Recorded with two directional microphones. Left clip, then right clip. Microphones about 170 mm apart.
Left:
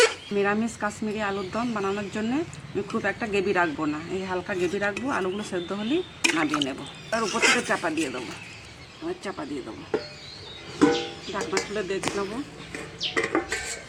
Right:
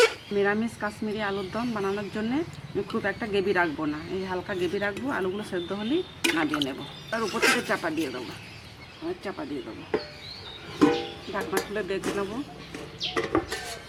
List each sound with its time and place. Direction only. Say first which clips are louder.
0.3 s speech: left 1 dB; 25° left (ahead or behind)
6.2 s a sound: left 2 dB; 5° right (ahead or behind)
6.6 s speech: left 1 dB; 20° left (ahead or behind)
7.3 s speech: left 2 dB; centre (ahead or behind)
7.7 s speech: left 2 dB; 25° left (ahead or behind)
10.8 s speech: left 1 dB; 5° right (ahead or behind)